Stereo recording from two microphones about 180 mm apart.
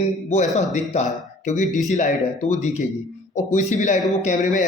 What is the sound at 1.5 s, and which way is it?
A man's voice, 40° left (ahead or behind).